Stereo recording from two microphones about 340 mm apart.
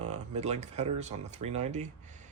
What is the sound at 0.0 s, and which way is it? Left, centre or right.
Speech, centre.